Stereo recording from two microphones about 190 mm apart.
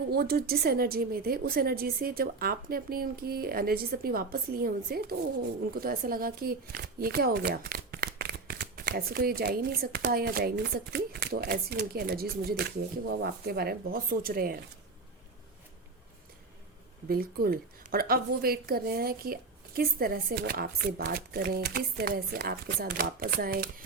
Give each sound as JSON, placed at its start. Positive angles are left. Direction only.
{"t": 0.1, "sound": "speech", "side_deg": -55}
{"t": 17.1, "sound": "speech", "side_deg": -50}